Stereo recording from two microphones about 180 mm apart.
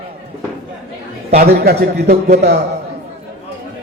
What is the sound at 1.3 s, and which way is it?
Speech, 60° right (ahead or behind).